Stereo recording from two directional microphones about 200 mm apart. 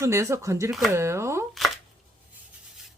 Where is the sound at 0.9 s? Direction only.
15° right (ahead or behind).